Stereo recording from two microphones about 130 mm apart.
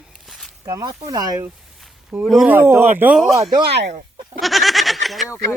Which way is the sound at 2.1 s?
15° right (ahead or behind).